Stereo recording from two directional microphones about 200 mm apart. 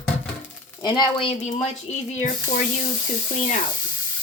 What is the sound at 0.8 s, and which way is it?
Speech, 20° left (ahead or behind).